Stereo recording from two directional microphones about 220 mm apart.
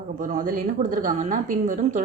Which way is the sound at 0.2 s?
35° right (ahead or behind).